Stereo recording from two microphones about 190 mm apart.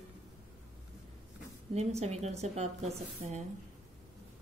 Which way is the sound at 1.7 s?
35° right (ahead or behind).